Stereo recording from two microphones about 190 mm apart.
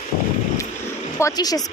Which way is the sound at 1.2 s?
20° left (ahead or behind).